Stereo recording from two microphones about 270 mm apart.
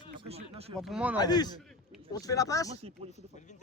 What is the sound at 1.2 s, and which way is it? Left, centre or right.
Speech, centre.